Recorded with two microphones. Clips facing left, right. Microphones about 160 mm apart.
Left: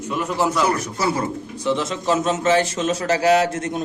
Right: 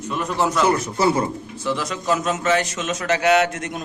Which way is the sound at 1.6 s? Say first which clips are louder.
Left 3 dB; 25° left (ahead or behind).